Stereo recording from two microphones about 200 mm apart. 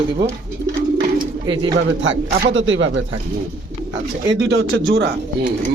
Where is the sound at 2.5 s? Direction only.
65° right (ahead or behind).